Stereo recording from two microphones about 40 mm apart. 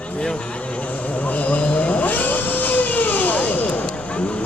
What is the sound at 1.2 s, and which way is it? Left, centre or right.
Vehicle, left.